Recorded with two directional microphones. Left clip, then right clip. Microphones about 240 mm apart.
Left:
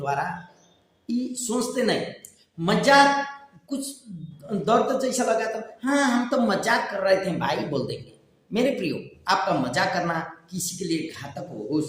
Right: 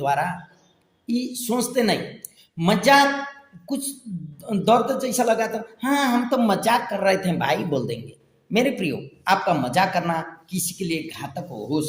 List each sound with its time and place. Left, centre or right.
0.0 s speech: right
4.4 s speech: right